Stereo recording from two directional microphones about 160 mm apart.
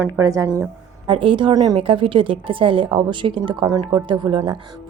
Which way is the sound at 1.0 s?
35° right (ahead or behind).